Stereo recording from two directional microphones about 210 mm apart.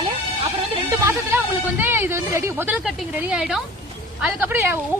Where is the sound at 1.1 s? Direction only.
10° right (ahead or behind).